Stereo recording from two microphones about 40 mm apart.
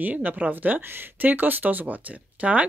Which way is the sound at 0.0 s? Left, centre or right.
Right.